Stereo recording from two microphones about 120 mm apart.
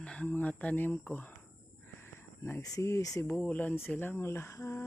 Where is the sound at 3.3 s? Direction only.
10° left (ahead or behind).